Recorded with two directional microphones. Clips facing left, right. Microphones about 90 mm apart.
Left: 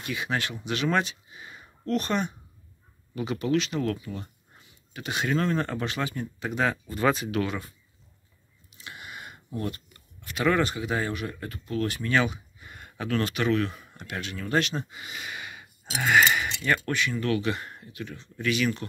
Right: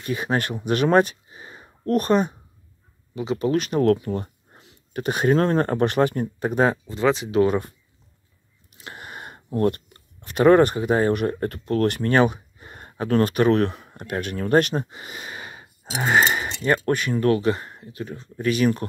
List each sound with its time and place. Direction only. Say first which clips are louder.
0.0 s speech: right 6 dB; 40° right (ahead or behind)
3.6 s speech: right 10 dB; 50° right (ahead or behind)
6.9 s speech: right 4 dB; 20° right (ahead or behind)
7.3 s speech: right 10 dB; 40° right (ahead or behind)
8.7 s speech: right 4 dB; 45° right (ahead or behind)
12.5 s speech: right 7 dB; 40° right (ahead or behind); by 13.8 s 55° right (ahead or behind)
13.8 s speech: right 8 dB; 45° right (ahead or behind); by 18.0 s 25° right (ahead or behind)
18.0 s speech: right 5 dB; 40° right (ahead or behind)